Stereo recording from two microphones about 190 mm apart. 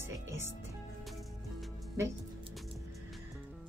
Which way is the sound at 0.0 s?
15° right (ahead or behind).